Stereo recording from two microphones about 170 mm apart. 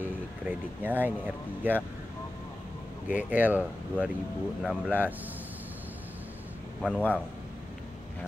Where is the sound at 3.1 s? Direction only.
10° right (ahead or behind).